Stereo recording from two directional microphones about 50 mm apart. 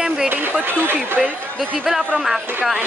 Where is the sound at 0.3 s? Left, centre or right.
Right.